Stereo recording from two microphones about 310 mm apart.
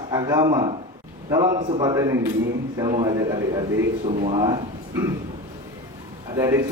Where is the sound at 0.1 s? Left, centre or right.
Centre.